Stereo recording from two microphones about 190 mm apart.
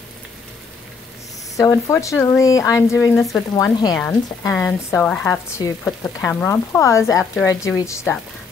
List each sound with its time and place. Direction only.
1.6 s speech: 15° left (ahead or behind)
5.6 s speech: 20° left (ahead or behind)
6.2 s speech: 10° left (ahead or behind)